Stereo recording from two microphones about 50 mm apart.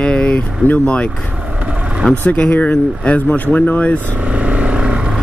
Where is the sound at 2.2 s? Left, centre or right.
Left.